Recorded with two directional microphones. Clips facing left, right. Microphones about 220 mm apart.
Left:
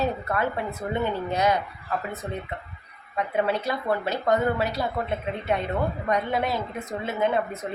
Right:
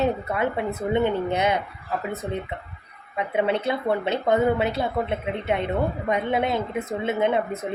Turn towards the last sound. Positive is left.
turn(degrees=-20)  # may be behind; listen again after turning